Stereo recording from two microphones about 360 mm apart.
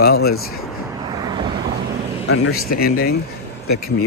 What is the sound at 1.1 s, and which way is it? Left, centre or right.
Vehicle, centre.